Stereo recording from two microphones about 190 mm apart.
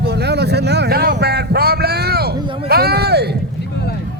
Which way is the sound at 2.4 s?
25° right (ahead or behind).